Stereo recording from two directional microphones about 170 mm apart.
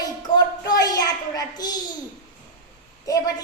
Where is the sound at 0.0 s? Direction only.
20° left (ahead or behind).